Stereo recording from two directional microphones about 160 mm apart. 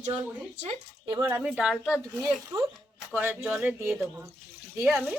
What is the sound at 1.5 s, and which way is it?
Speech, 5° right (ahead or behind).